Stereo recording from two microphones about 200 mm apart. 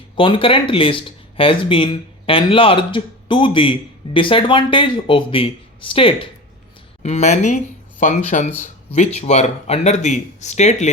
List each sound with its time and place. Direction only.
0.2 s speech: 25° left (ahead or behind)